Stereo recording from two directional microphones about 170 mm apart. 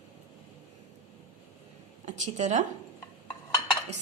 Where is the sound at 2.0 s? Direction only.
45° right (ahead or behind).